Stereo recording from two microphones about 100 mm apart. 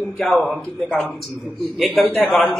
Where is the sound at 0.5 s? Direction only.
10° left (ahead or behind).